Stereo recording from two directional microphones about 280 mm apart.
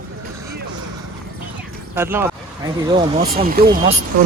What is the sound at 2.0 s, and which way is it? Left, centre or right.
Speech, centre.